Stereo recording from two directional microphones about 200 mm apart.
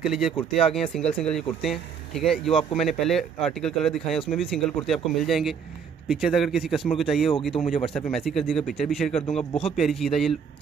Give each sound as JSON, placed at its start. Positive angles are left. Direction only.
{"t": 0.0, "sound": "speech", "side_deg": 0}
{"t": 7.5, "sound": "a man's voice", "side_deg": 25}
{"t": 7.9, "sound": "speech", "side_deg": 0}
{"t": 9.3, "sound": "a man's voice", "side_deg": 30}
{"t": 9.7, "sound": "speech", "side_deg": 0}